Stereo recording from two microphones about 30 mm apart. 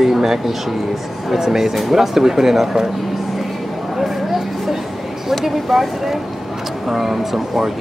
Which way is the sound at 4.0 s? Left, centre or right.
Centre.